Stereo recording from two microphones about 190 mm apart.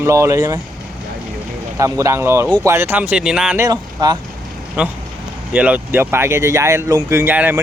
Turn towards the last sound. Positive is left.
turn(degrees=-10)  # may be behind; listen again after turning